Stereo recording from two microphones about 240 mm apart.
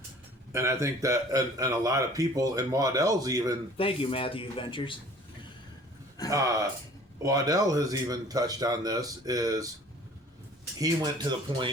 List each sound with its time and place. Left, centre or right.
0.5 s speech: centre
3.8 s speech: left
6.3 s speech: centre
10.8 s speech: centre